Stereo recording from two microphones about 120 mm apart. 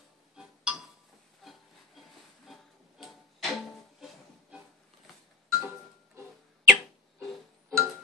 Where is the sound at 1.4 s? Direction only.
Centre (ahead or behind).